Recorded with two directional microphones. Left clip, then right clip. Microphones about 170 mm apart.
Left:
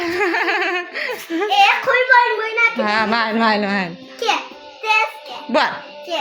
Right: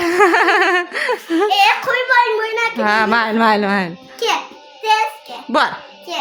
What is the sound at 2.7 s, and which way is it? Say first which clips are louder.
A woman's voice: right 3 dB; 25° right (ahead or behind).